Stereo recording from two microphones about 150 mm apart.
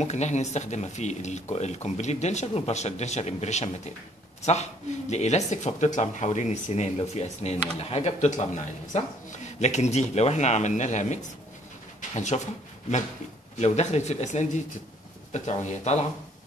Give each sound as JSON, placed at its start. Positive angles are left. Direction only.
{"t": 0.0, "sound": "speech", "side_deg": 50}
{"t": 13.6, "sound": "speech", "side_deg": 45}